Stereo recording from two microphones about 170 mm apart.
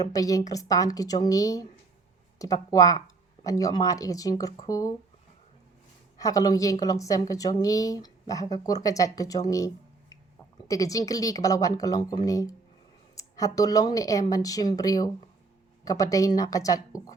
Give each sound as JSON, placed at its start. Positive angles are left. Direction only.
{"t": 0.0, "sound": "a woman's voice", "side_deg": 20}
{"t": 6.1, "sound": "a woman's voice", "side_deg": 20}